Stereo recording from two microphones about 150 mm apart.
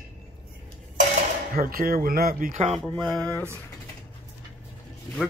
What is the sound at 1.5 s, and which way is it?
Speech, 75° right (ahead or behind).